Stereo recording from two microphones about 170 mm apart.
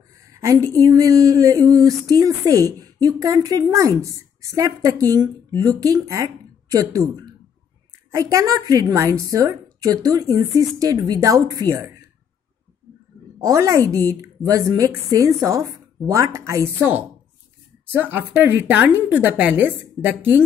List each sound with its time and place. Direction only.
0.3 s a sound: 20° right (ahead or behind)
0.7 s speech: 20° right (ahead or behind)
8.1 s speech: 20° right (ahead or behind)
13.4 s speech: 20° right (ahead or behind)
18.1 s a woman's voice: 15° right (ahead or behind)